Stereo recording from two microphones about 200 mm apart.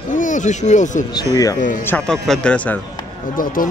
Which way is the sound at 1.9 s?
5° left (ahead or behind).